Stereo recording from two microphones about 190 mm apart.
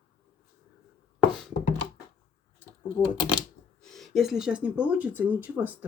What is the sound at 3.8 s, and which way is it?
Speech, centre (ahead or behind).